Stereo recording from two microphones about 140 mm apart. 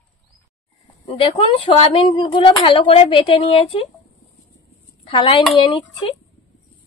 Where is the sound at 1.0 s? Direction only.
45° left (ahead or behind).